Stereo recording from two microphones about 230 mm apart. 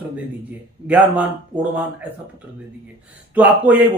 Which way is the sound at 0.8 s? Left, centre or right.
Centre.